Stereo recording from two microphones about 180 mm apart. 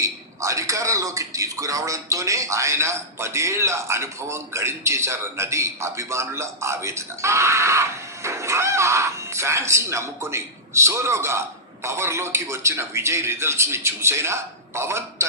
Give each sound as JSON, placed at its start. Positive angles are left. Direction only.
{"t": 0.0, "sound": "a man's voice", "side_deg": -15}